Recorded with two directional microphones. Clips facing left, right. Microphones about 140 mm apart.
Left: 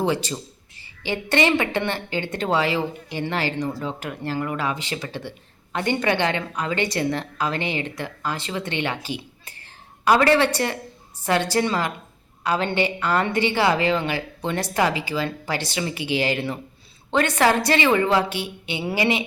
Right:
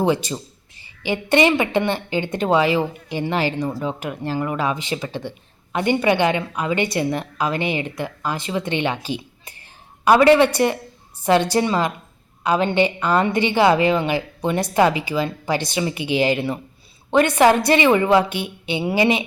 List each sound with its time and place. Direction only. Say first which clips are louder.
0.0 s a woman's voice: right 3 dB; 15° right (ahead or behind)